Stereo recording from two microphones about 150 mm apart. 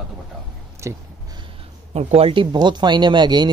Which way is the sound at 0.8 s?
20° right (ahead or behind).